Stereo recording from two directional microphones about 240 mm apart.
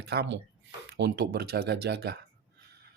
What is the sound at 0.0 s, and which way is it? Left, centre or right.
Speech, right.